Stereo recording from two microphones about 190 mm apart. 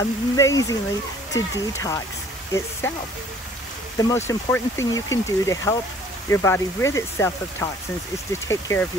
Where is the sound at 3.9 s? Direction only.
15° left (ahead or behind).